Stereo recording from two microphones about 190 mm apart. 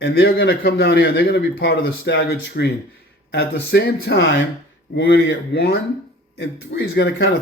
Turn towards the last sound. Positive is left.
turn(degrees=60)  # may be behind; listen again after turning